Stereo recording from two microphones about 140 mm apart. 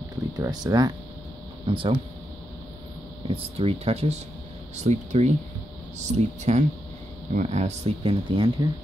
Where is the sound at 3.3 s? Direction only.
45° right (ahead or behind).